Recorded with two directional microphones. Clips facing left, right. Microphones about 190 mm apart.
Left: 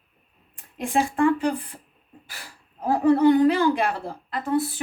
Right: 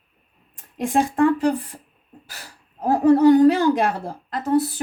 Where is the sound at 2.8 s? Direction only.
40° right (ahead or behind).